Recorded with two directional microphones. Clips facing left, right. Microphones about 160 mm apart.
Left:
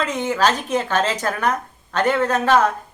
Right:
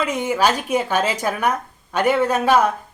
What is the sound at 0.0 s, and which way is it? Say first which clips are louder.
Speech: right 1 dB; 10° right (ahead or behind).